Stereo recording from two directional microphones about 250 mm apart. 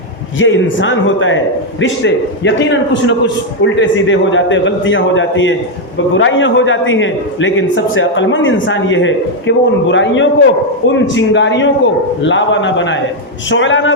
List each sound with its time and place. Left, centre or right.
0.3 s a man's voice: left